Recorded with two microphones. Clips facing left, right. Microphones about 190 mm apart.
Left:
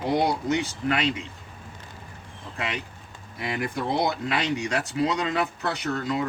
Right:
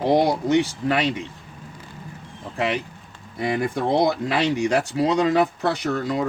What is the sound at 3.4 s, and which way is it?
Speech, 30° right (ahead or behind).